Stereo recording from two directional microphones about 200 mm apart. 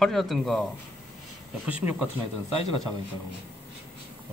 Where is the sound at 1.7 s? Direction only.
5° right (ahead or behind).